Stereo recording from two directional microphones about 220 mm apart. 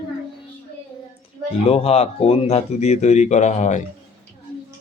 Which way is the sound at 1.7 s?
25° left (ahead or behind).